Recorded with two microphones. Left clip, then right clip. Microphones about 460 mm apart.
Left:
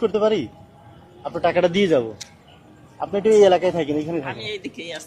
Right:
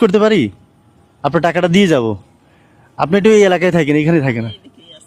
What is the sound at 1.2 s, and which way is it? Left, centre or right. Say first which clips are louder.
Speech: right 5 dB; right.